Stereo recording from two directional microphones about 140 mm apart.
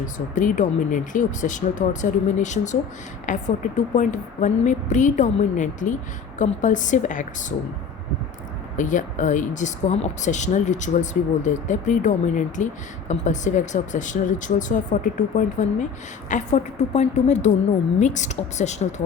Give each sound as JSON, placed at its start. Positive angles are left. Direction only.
{"t": 0.3, "sound": "speech", "side_deg": 65}
{"t": 8.7, "sound": "speech", "side_deg": 65}